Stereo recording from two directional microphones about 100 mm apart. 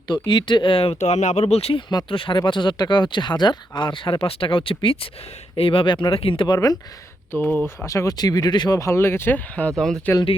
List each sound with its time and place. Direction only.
0.1 s speech: 50° left (ahead or behind); by 1.8 s 90° left
2.0 s speech: 60° left (ahead or behind)
7.3 s speech: 20° left (ahead or behind)
7.9 s speech: 35° left (ahead or behind)